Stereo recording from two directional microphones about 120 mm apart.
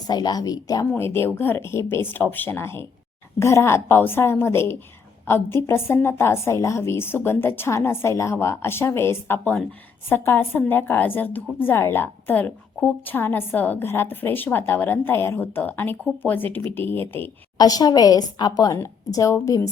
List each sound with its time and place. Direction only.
0.1 s a woman's voice: 35° left (ahead or behind)
0.9 s a woman's voice: 20° left (ahead or behind)
17.6 s a woman's voice: 30° left (ahead or behind)